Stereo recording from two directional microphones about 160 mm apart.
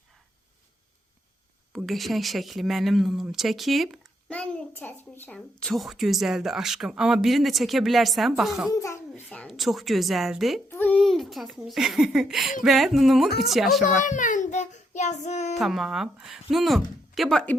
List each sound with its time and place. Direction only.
1.7 s speech: centre (ahead or behind)
8.7 s speech: 20° left (ahead or behind); by 10.6 s centre (ahead or behind)
10.7 s a child's voice: 10° left (ahead or behind)
13.8 s a child's voice: 50° left (ahead or behind)
15.5 s speech: centre (ahead or behind)